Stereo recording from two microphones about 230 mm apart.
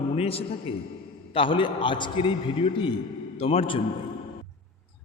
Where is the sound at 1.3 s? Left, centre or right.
Left.